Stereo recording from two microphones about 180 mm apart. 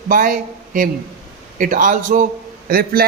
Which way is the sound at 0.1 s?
50° right (ahead or behind).